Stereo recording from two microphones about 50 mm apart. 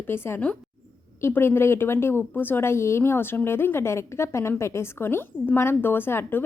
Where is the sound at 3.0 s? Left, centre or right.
Left.